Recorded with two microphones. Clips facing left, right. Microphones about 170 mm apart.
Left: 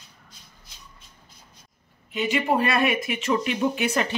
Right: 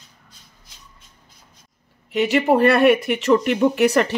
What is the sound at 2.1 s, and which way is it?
Speech, 70° right (ahead or behind).